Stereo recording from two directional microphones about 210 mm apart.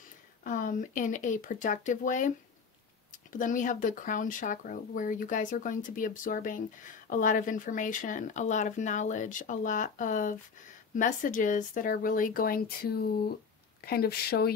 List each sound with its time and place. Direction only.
0.4 s speech: 40° left (ahead or behind)
3.3 s speech: 40° left (ahead or behind)